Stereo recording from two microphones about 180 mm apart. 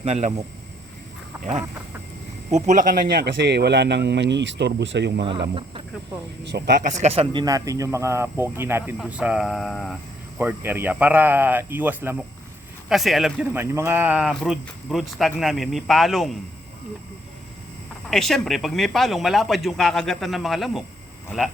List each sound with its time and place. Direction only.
0.0 s speech: 40° right (ahead or behind)
2.5 s speech: 40° right (ahead or behind); by 5.2 s 75° right (ahead or behind)
6.4 s speech: 70° right (ahead or behind)
6.8 s speech: 40° right (ahead or behind)
7.4 s speech: 20° right (ahead or behind); by 10.0 s centre (ahead or behind)
10.3 s speech: 10° right (ahead or behind)
18.1 s speech: centre (ahead or behind)